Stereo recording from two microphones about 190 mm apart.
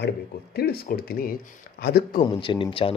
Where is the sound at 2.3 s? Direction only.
25° left (ahead or behind).